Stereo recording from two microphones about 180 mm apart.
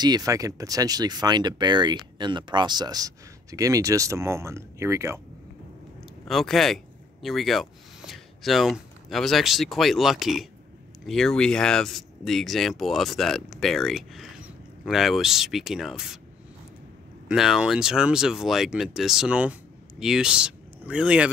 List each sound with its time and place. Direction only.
0.0 s speech: 20° right (ahead or behind)
6.2 s speech: centre (ahead or behind)
17.3 s speech: 5° right (ahead or behind)